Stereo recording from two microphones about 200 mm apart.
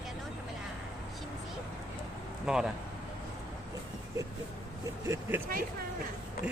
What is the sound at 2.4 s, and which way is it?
Speech, 5° right (ahead or behind).